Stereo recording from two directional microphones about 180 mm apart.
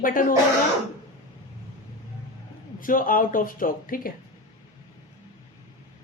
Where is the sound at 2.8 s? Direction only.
50° left (ahead or behind).